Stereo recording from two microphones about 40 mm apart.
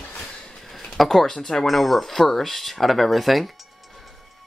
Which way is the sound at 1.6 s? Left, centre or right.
Centre.